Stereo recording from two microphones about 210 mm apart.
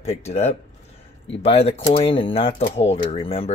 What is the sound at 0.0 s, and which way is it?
Speech, 30° left (ahead or behind).